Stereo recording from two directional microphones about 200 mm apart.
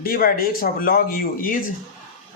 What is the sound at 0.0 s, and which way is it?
Speech, 45° left (ahead or behind).